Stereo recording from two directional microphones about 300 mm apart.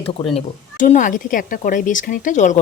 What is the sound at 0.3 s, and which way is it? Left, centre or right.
Speech, left.